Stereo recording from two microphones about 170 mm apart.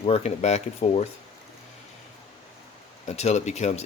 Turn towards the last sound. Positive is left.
turn(degrees=40)  # may be behind; listen again after turning